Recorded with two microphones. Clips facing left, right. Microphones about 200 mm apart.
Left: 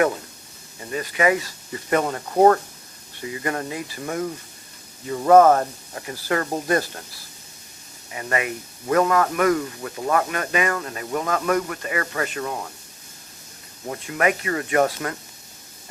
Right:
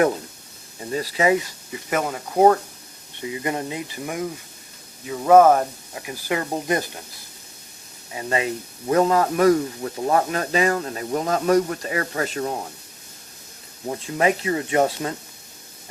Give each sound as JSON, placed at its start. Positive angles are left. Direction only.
{"t": 0.9, "sound": "speech", "side_deg": -30}
{"t": 1.7, "sound": "speech", "side_deg": -5}
{"t": 3.2, "sound": "speech", "side_deg": -20}
{"t": 8.2, "sound": "speech", "side_deg": -25}
{"t": 13.9, "sound": "speech", "side_deg": -25}